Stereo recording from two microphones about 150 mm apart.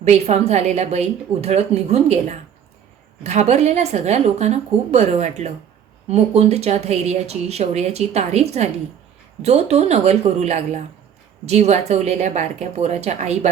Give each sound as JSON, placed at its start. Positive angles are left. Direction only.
{"t": 0.0, "sound": "speech", "side_deg": -45}